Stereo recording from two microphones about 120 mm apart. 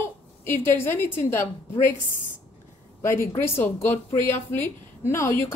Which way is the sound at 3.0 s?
20° left (ahead or behind).